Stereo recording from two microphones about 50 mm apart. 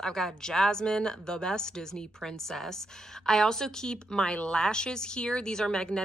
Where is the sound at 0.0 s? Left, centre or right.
Centre.